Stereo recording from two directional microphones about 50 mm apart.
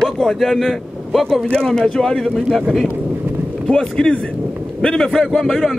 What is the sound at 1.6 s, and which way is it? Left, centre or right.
A man's voice, centre.